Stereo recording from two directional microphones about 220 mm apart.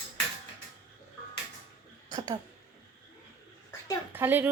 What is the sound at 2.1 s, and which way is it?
Speech, 20° right (ahead or behind).